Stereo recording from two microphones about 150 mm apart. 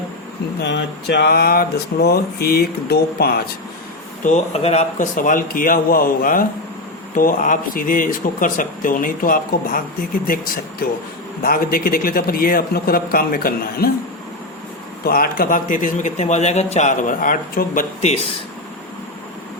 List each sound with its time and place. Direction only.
1.2 s speech: 90° left
4.2 s a man's voice: 55° left (ahead or behind); by 13.9 s 80° left
15.0 s speech: 75° left (ahead or behind)